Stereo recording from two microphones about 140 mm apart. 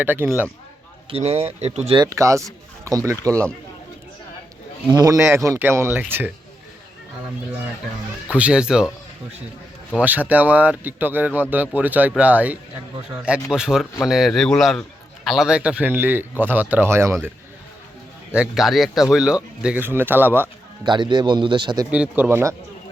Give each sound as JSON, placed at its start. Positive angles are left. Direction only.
{"t": 0.0, "sound": "a man's voice", "side_deg": -15}
{"t": 1.1, "sound": "speech", "side_deg": -45}
{"t": 2.0, "sound": "speech", "side_deg": -20}
{"t": 4.9, "sound": "a man's voice", "side_deg": -25}
{"t": 8.3, "sound": "a man's voice", "side_deg": -5}
{"t": 10.0, "sound": "a man's voice", "side_deg": -10}
{"t": 18.3, "sound": "a man's voice", "side_deg": 0}
{"t": 20.8, "sound": "a man's voice", "side_deg": -35}
{"t": 21.8, "sound": "a man's voice", "side_deg": -10}